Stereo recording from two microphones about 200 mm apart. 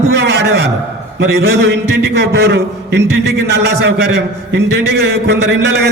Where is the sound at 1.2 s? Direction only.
60° right (ahead or behind).